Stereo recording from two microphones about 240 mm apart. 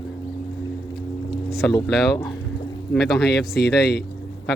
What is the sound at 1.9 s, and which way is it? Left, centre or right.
A man's voice, centre.